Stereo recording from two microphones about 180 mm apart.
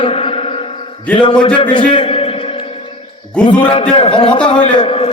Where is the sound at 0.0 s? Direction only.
30° left (ahead or behind).